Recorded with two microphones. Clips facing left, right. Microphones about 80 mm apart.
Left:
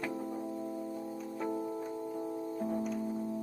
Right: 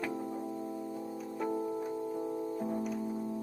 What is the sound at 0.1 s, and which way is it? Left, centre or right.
Music, centre.